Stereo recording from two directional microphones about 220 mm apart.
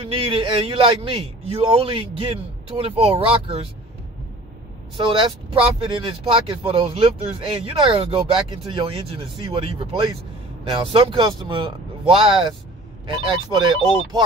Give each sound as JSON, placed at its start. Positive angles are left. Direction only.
{"t": 0.0, "sound": "speech", "side_deg": -25}
{"t": 4.9, "sound": "speech", "side_deg": -20}